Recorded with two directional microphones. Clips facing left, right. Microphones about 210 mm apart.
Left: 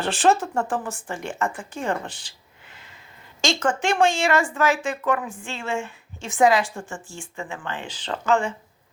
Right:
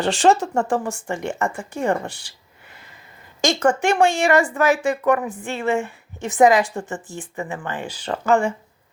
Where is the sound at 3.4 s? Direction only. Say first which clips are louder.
Right 5 dB; 60° right (ahead or behind).